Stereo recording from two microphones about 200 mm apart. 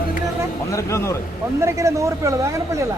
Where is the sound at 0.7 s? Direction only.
15° left (ahead or behind).